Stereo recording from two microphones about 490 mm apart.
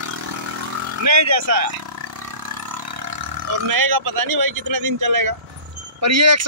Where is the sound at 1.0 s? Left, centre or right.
Right.